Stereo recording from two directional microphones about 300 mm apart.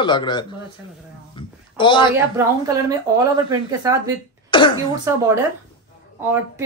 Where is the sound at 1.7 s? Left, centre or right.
Centre.